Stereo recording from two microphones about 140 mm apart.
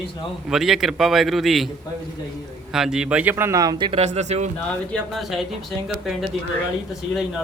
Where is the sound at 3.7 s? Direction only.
40° right (ahead or behind).